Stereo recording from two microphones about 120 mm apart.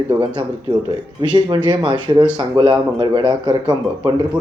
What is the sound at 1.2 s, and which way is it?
A man's voice, 40° right (ahead or behind).